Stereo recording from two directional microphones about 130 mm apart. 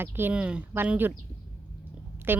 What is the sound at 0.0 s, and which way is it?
Speech, 15° right (ahead or behind).